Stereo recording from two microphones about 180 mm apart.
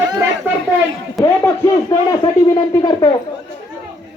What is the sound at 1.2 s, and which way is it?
A man's voice, 20° left (ahead or behind).